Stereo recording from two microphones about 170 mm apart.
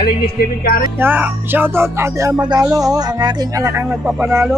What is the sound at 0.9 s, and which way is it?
Speech, 10° right (ahead or behind).